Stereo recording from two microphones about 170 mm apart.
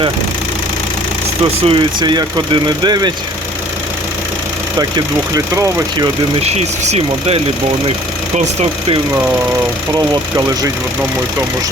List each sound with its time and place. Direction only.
1.6 s speech: 30° right (ahead or behind)
4.8 s speech: 20° right (ahead or behind)
6.4 s speech: 40° right (ahead or behind)
10.3 s speech: 20° right (ahead or behind)